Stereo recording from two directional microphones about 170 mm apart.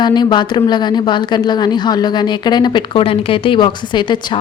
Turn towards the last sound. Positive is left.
turn(degrees=30)  # may be behind; listen again after turning